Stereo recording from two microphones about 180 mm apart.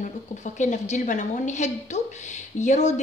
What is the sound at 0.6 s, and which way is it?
A woman's voice, 40° left (ahead or behind).